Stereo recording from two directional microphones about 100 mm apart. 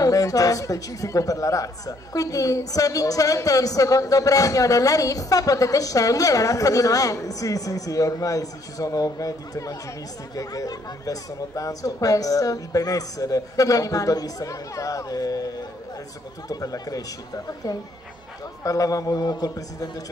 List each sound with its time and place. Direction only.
0.0 s a man's voice: 35° left (ahead or behind)